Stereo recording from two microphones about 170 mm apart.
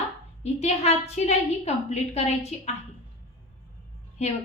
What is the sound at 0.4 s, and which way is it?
A woman's voice, 40° left (ahead or behind).